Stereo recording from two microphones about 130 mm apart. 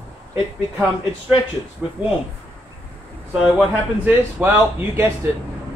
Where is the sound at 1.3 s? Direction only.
5° right (ahead or behind).